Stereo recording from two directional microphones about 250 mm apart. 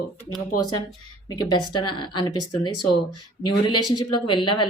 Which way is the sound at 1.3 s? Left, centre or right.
Centre.